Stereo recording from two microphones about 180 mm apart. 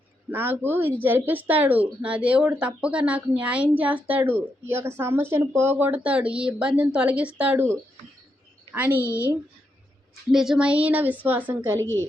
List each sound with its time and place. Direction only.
0.3 s speech: 10° right (ahead or behind)
10.2 s speech: 5° right (ahead or behind)